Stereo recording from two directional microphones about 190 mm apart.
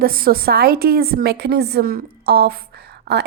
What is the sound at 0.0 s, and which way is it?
A woman's voice, 50° right (ahead or behind).